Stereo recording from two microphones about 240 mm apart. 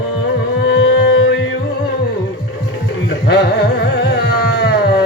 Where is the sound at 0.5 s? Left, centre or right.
Left.